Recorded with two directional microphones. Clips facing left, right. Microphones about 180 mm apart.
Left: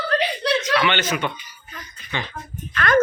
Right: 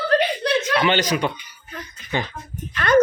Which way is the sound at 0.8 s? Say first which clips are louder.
Right 2 dB; 35° right (ahead or behind).